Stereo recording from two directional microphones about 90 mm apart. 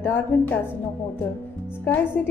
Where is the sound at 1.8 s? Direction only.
20° left (ahead or behind).